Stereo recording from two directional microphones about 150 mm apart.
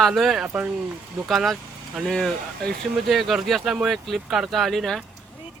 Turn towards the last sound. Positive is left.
turn(degrees=0)  # may be behind; listen again after turning